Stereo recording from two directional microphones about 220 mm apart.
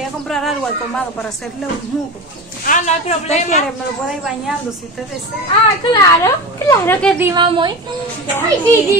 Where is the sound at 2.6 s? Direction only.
35° left (ahead or behind).